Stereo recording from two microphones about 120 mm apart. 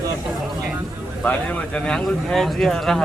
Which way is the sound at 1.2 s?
10° left (ahead or behind).